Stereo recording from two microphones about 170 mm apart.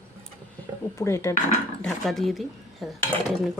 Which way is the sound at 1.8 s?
Centre (ahead or behind).